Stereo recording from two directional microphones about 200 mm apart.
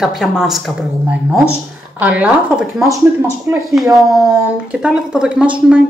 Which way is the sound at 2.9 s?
15° right (ahead or behind).